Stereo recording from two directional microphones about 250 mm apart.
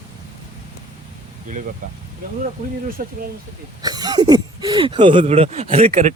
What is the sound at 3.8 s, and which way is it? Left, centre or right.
Speech, centre.